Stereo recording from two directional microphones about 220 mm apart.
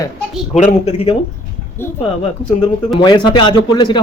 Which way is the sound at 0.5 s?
30° left (ahead or behind).